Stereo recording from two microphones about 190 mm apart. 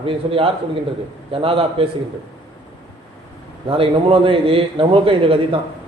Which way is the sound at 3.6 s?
30° right (ahead or behind).